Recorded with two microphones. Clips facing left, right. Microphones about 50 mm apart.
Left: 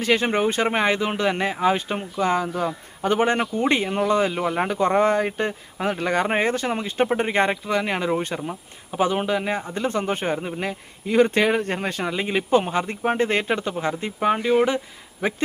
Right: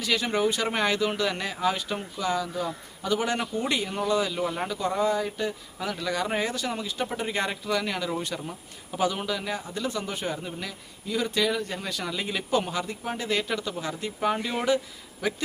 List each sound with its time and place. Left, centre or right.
0.0 s speech: left
8.4 s speech: left